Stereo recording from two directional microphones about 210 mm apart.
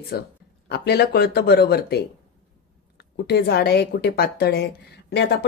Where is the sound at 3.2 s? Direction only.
50° left (ahead or behind).